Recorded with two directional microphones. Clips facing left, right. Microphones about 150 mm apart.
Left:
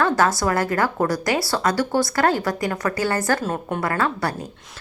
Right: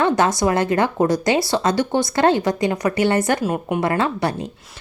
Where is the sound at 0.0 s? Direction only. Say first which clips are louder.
Right 2 dB; 20° right (ahead or behind).